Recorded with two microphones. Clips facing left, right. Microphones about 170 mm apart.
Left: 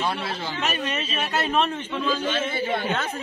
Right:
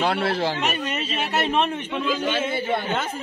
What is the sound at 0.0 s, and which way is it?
Speech, 70° right (ahead or behind).